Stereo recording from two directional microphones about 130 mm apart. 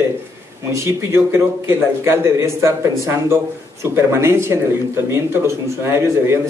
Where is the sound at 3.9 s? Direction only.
20° right (ahead or behind).